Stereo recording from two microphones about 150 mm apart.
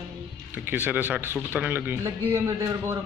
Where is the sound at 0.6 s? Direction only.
10° right (ahead or behind).